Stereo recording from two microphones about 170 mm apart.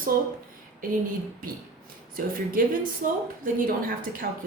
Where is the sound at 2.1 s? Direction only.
55° right (ahead or behind).